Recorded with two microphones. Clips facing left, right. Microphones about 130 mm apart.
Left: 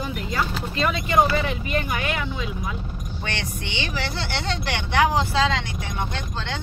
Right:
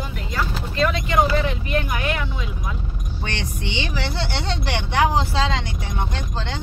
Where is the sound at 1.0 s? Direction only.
5° left (ahead or behind).